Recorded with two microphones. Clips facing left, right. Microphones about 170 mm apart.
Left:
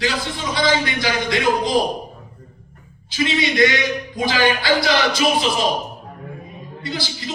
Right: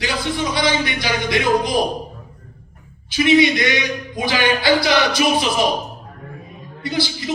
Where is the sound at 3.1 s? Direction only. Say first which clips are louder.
Right 6 dB; 20° right (ahead or behind).